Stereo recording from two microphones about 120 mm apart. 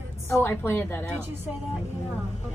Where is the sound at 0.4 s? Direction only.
20° left (ahead or behind).